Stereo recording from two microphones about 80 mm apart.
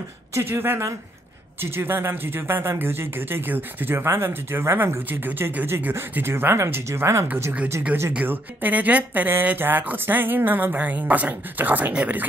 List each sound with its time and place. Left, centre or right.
0.3 s speech: right
8.1 s speech: centre